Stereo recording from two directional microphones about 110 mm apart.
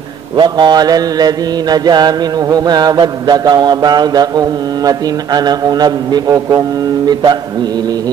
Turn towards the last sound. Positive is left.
turn(degrees=-45)  # may be behind; listen again after turning